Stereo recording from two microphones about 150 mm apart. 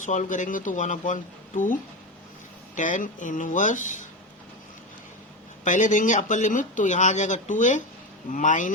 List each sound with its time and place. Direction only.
0.0 s speech: 55° left (ahead or behind)
5.6 s speech: 60° left (ahead or behind)